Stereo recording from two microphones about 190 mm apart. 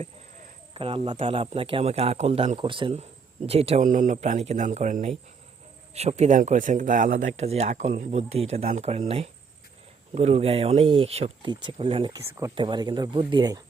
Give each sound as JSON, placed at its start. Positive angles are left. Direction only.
{"t": 0.0, "sound": "snake", "side_deg": -30}
{"t": 1.2, "sound": "speech", "side_deg": -30}